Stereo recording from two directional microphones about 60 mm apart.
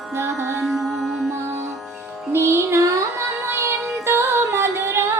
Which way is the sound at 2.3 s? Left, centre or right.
Right.